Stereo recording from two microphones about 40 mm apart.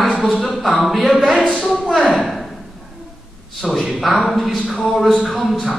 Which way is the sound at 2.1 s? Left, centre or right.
Centre.